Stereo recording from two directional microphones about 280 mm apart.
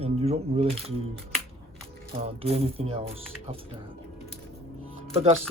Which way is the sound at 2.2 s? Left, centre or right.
Right.